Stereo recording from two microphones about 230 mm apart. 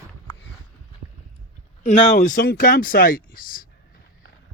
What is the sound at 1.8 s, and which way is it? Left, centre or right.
Speech, left.